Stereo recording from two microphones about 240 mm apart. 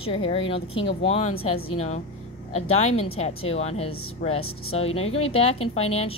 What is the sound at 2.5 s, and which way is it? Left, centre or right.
A woman's voice, left.